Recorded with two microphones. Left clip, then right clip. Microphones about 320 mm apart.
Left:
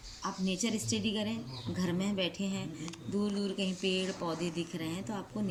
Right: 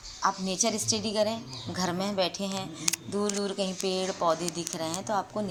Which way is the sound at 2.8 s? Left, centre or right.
Right.